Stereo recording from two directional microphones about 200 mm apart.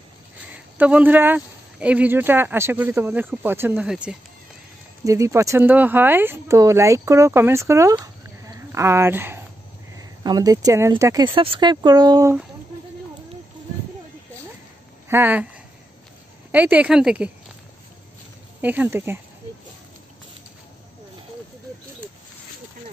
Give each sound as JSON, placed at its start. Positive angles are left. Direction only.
{"t": 0.5, "sound": "speech", "side_deg": -5}
{"t": 5.0, "sound": "speech", "side_deg": -15}
{"t": 15.0, "sound": "speech", "side_deg": -10}
{"t": 18.6, "sound": "speech", "side_deg": -10}